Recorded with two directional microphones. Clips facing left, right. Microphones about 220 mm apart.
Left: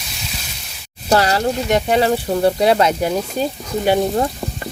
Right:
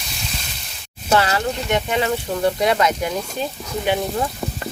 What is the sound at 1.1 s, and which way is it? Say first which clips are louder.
Speech: left 3 dB; 35° left (ahead or behind).